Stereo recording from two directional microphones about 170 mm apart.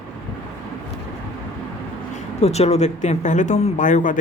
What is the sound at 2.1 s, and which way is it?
Speech, 40° left (ahead or behind).